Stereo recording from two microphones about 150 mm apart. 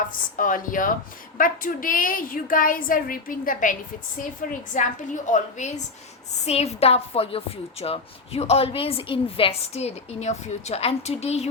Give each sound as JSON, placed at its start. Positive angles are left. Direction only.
{"t": 0.3, "sound": "a woman's voice", "side_deg": 65}